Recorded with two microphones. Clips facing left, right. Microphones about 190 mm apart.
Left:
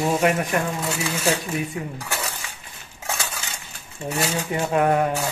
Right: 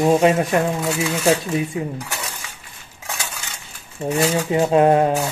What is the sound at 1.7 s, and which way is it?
Speech, 25° right (ahead or behind).